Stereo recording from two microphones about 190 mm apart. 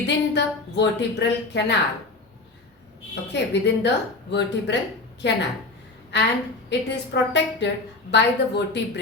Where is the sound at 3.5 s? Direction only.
65° left (ahead or behind).